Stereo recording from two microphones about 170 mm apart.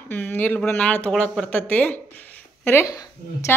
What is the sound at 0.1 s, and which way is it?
Speech, 10° left (ahead or behind).